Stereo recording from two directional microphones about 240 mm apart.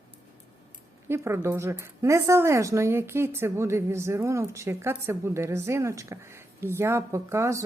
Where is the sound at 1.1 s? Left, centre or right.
Centre.